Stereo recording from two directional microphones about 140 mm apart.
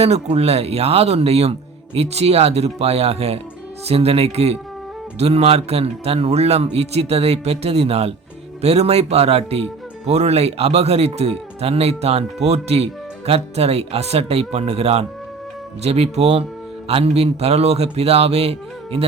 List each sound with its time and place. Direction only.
0.0 s speech: 50° right (ahead or behind)